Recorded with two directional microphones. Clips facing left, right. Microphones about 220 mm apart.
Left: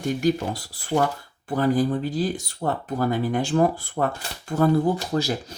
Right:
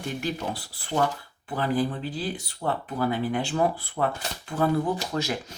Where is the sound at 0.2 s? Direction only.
45° left (ahead or behind).